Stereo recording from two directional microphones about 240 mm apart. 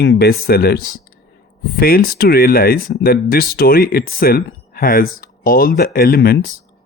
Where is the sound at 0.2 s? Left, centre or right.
Left.